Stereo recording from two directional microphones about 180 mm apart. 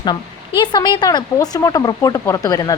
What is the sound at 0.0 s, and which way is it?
Speech, 25° left (ahead or behind).